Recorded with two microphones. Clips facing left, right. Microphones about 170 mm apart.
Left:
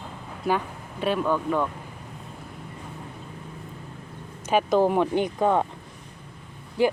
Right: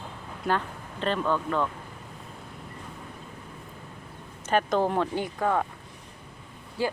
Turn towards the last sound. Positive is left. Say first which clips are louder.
# left 7 dB
turn(degrees=20)  # may be behind; listen again after turning